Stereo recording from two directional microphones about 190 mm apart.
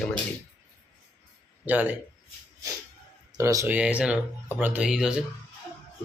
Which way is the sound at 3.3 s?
15° right (ahead or behind).